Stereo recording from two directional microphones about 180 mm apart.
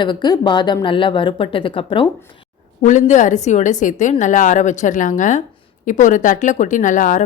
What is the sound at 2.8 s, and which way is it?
A woman's voice, 40° left (ahead or behind).